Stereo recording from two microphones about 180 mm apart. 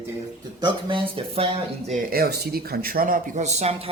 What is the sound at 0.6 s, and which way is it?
Speech, 25° right (ahead or behind).